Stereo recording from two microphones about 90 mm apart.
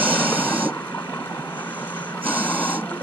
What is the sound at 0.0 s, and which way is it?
Vehicle, 20° right (ahead or behind).